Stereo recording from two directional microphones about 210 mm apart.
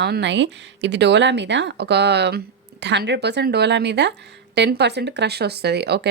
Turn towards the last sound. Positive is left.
turn(degrees=-50)  # may be behind; listen again after turning